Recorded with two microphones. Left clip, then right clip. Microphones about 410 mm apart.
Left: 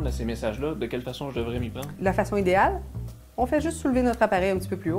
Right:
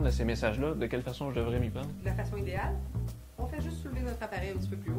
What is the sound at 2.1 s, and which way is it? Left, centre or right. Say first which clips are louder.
Speech: left 16 dB; left.